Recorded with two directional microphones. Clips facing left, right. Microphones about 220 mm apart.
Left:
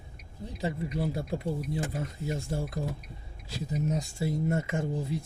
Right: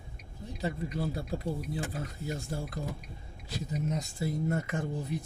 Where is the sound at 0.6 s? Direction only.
25° left (ahead or behind).